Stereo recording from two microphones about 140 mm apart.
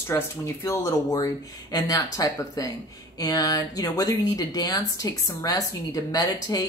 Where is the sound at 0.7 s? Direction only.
25° left (ahead or behind).